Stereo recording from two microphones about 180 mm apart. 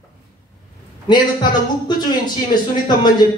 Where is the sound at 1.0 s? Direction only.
25° left (ahead or behind).